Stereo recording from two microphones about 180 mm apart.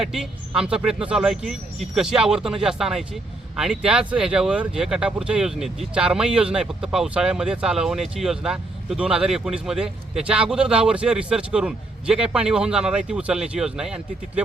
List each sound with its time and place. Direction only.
0.0 s speech: 5° right (ahead or behind)